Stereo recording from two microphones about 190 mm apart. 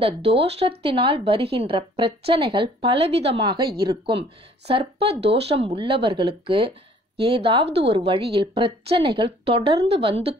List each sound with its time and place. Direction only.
0.4 s a woman's voice: 30° right (ahead or behind)